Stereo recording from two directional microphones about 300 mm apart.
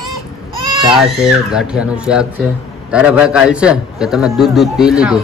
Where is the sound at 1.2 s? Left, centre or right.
Centre.